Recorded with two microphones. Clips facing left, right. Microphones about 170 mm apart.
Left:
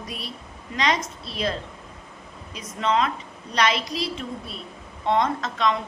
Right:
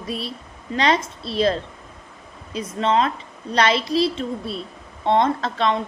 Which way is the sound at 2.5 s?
30° right (ahead or behind).